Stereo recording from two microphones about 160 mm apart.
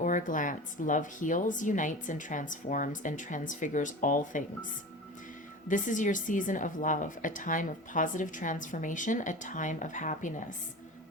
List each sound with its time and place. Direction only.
0.0 s speech: 55° left (ahead or behind)
5.6 s speech: 55° left (ahead or behind)